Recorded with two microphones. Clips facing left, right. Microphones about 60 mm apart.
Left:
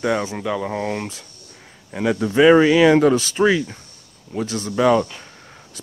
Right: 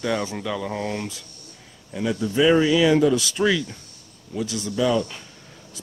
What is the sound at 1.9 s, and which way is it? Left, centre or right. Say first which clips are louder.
Speech: left 5 dB; left.